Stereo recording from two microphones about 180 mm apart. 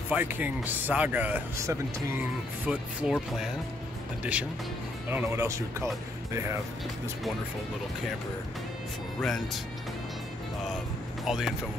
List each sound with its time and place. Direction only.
0.1 s speech: 10° right (ahead or behind)
9.2 s speech: centre (ahead or behind)
11.2 s speech: centre (ahead or behind)